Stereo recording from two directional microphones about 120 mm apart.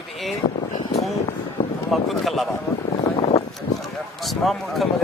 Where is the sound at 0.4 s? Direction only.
40° left (ahead or behind).